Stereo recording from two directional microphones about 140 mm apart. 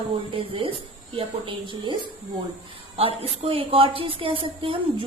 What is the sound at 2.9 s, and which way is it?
A woman's voice, 45° right (ahead or behind).